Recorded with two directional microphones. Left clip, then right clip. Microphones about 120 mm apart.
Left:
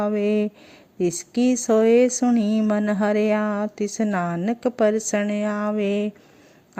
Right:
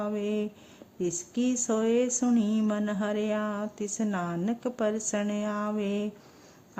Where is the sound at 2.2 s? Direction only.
15° left (ahead or behind).